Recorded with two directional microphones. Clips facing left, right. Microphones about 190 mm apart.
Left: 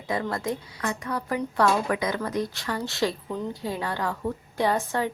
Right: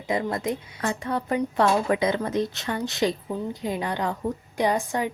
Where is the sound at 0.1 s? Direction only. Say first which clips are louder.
Right 2 dB; 20° right (ahead or behind).